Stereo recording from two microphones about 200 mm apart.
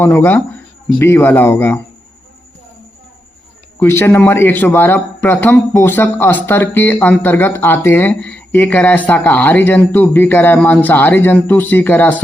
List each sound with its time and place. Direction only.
0.0 s a man's voice: 10° left (ahead or behind)
3.8 s a man's voice: 10° left (ahead or behind)